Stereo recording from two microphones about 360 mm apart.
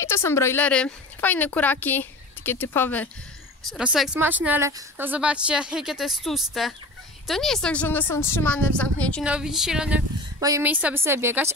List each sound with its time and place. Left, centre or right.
0.0 s a woman's voice: centre